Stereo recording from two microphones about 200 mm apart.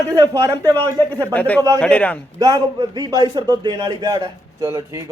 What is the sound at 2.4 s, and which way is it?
A man's voice, 20° right (ahead or behind).